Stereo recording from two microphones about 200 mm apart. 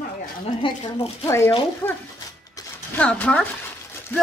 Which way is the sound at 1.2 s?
15° left (ahead or behind).